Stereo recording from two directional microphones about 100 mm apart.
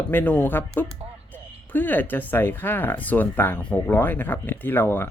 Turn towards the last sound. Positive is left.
turn(degrees=20)  # may be behind; listen again after turning